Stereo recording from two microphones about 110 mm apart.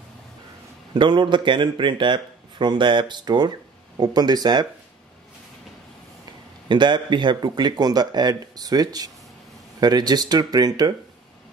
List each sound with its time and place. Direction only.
0.9 s a man's voice: 45° right (ahead or behind)
6.7 s speech: 45° right (ahead or behind)